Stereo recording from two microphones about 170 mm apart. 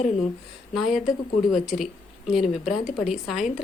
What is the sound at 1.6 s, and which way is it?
A woman's voice, 5° right (ahead or behind).